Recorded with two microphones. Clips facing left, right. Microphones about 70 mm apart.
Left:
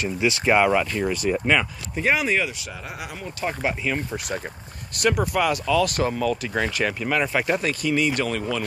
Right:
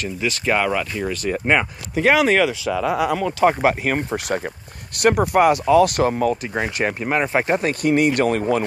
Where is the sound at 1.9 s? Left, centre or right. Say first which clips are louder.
Right 6 dB; right.